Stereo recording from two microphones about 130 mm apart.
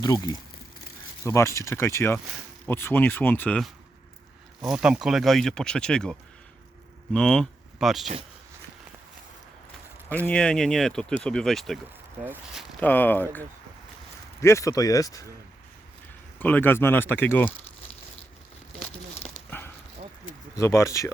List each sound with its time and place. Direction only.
0.0 s speech: 30° left (ahead or behind); by 3.6 s 15° left (ahead or behind)
4.6 s speech: 5° right (ahead or behind)
10.2 s speech: 5° left (ahead or behind)
12.8 s speech: 15° left (ahead or behind)
14.4 s speech: 25° left (ahead or behind)
16.4 s speech: 15° left (ahead or behind)
19.5 s a sound: 15° left (ahead or behind)
20.6 s speech: 20° left (ahead or behind)